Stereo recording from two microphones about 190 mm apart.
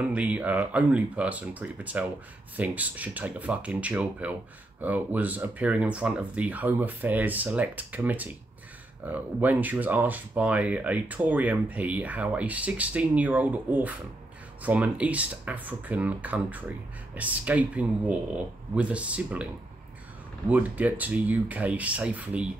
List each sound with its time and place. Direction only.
0.0 s speech: 5° right (ahead or behind)
20.4 s speech: 10° right (ahead or behind)